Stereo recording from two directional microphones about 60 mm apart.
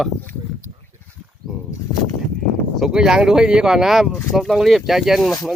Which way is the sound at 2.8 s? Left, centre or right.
Centre.